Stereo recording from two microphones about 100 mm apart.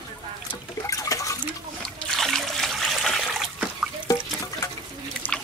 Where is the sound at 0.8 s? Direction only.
35° left (ahead or behind).